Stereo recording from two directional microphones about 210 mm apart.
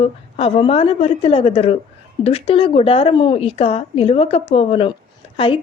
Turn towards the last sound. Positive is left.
turn(degrees=25)  # may be behind; listen again after turning